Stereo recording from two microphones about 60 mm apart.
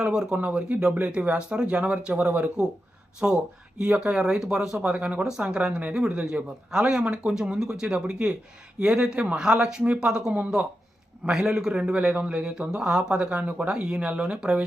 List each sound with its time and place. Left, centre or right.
0.0 s a man's voice: centre
0.3 s a man's voice: right
11.3 s a man's voice: centre